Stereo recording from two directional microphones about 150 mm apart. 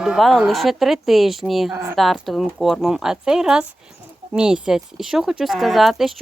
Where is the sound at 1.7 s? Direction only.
20° right (ahead or behind).